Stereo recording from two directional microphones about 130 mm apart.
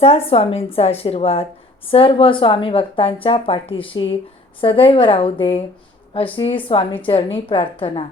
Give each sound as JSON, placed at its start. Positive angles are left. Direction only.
{"t": 0.0, "sound": "speech", "side_deg": 50}